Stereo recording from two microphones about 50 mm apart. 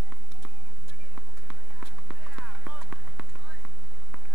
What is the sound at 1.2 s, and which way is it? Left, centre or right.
Run, centre.